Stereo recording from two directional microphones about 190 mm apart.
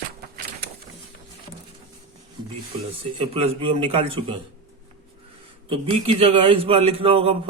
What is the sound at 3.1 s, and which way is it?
A man's voice, 30° right (ahead or behind).